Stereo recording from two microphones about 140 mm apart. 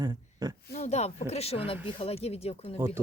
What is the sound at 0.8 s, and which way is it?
Speech, 55° left (ahead or behind).